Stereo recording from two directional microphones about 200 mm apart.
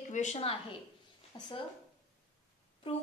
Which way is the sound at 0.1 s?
35° left (ahead or behind).